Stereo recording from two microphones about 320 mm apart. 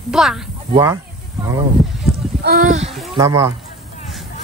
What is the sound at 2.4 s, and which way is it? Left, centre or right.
Speech, right.